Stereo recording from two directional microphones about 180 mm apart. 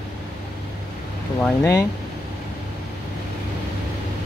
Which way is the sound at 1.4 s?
10° left (ahead or behind).